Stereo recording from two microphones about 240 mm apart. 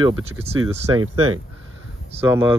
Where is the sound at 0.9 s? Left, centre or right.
Right.